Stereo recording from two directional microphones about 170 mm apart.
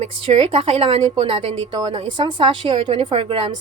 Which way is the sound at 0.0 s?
35° right (ahead or behind).